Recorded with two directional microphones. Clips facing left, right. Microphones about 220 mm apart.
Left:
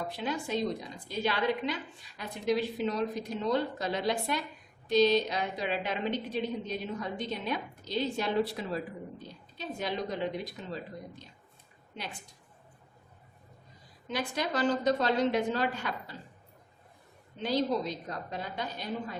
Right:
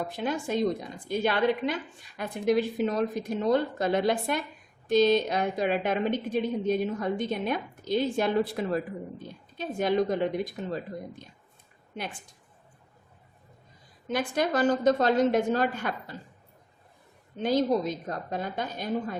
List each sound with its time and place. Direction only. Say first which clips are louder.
0.1 s a woman's voice: right 4 dB; 50° right (ahead or behind)
14.1 s a woman's voice: right 6 dB; 50° right (ahead or behind)
17.3 s a woman's voice: right 5 dB; 50° right (ahead or behind)